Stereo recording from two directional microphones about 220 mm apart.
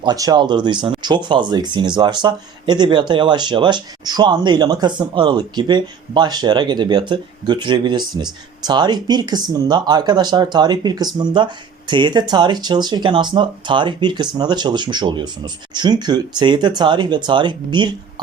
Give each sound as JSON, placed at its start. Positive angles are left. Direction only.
{"t": 0.0, "sound": "speech", "side_deg": -20}